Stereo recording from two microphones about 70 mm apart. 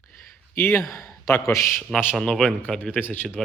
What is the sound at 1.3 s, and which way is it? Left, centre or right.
Speech, left.